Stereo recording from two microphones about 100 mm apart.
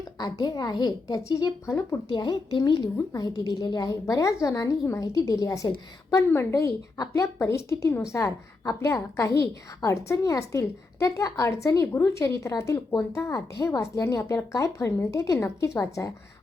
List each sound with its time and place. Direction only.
0.2 s speech: 45° left (ahead or behind)
1.6 s a woman's voice: 25° left (ahead or behind)
2.0 s a woman's voice: 50° left (ahead or behind); by 16.1 s 30° left (ahead or behind)